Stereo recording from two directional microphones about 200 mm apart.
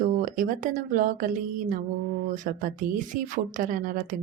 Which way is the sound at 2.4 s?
40° right (ahead or behind).